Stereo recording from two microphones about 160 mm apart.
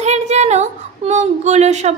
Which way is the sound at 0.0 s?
45° right (ahead or behind).